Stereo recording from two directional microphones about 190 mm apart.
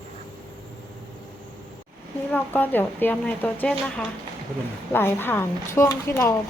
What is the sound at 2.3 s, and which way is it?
A woman's voice, 10° left (ahead or behind).